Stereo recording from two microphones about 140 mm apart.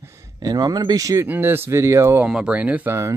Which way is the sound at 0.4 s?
25° right (ahead or behind).